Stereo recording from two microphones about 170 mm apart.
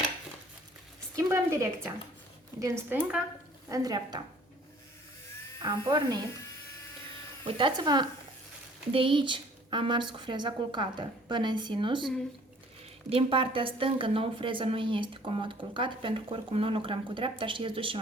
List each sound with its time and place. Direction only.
1.1 s a woman's voice: 15° right (ahead or behind)
2.9 s speech: 5° right (ahead or behind)
3.7 s a woman's voice: 25° right (ahead or behind)
5.6 s a woman's voice: 25° right (ahead or behind)
7.4 s a woman's voice: 25° right (ahead or behind)
13.1 s a woman's voice: 35° right (ahead or behind)